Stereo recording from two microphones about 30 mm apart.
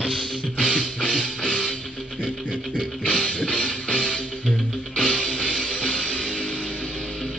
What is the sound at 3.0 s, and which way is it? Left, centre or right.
Music, left.